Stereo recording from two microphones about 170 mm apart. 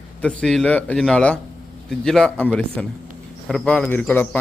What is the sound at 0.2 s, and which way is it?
A man's voice, 5° left (ahead or behind).